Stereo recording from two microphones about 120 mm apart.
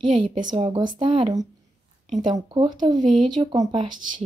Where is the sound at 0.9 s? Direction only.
45° right (ahead or behind).